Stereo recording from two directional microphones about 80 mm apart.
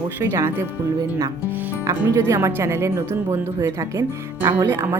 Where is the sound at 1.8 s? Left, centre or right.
Right.